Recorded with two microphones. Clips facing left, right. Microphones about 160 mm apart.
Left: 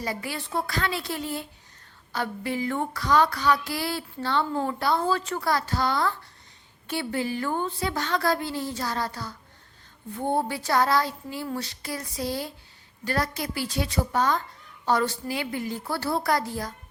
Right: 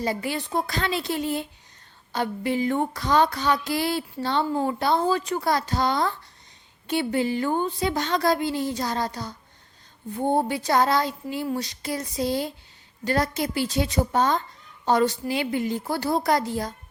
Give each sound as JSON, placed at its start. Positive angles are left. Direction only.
{"t": 0.0, "sound": "speech", "side_deg": -25}